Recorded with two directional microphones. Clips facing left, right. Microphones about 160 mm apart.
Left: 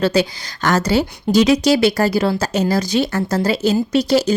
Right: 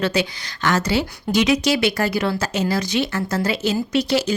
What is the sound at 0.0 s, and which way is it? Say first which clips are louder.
A woman's voice: left 5 dB; 35° left (ahead or behind).